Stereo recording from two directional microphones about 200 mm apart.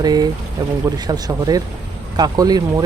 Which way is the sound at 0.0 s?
20° right (ahead or behind).